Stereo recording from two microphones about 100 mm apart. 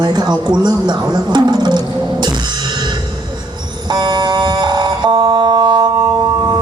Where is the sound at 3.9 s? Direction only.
50° right (ahead or behind).